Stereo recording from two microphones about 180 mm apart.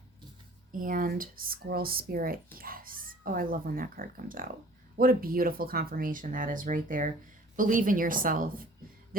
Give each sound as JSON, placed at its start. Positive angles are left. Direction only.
{"t": 0.7, "sound": "speech", "side_deg": -50}